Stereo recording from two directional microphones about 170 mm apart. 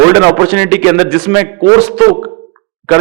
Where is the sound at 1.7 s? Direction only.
25° right (ahead or behind).